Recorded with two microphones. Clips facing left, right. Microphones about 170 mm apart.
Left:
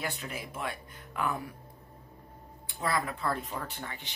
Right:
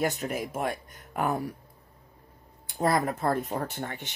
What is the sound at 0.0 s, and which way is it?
Speech, 45° right (ahead or behind).